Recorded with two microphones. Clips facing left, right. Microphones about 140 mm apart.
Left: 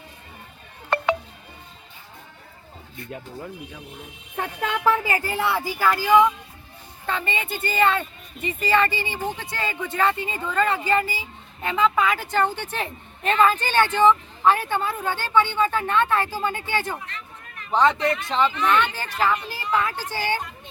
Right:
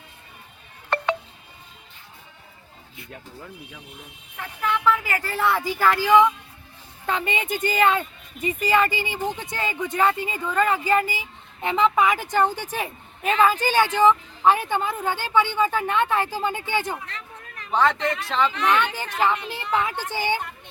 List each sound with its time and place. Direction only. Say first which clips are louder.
0.9 s a sound: left 1 dB; 5° left (ahead or behind)
4.4 s speech: even; 60° left (ahead or behind)
5.0 s speech: left 1 dB; 20° left (ahead or behind)
5.5 s speech: right 2 dB; 5° left (ahead or behind)
7.1 s speech: right 2 dB; 15° right (ahead or behind)
17.8 s speech: left 4 dB; 10° left (ahead or behind)
19.2 s a woman's voice: even; 20° right (ahead or behind)